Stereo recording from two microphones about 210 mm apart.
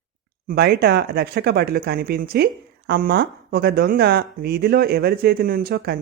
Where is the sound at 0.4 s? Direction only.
50° right (ahead or behind).